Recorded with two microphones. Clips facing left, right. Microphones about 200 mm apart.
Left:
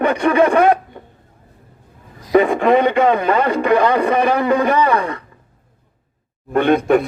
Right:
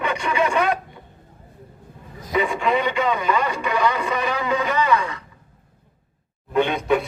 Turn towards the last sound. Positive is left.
turn(degrees=55)  # may be behind; listen again after turning